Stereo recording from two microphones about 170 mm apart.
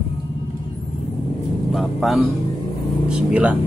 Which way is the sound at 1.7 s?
Centre (ahead or behind).